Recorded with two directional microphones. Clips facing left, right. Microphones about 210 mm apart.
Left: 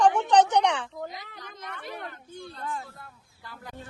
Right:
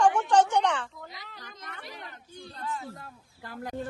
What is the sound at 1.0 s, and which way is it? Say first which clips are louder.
A child's voice: left 6 dB; 55° left (ahead or behind).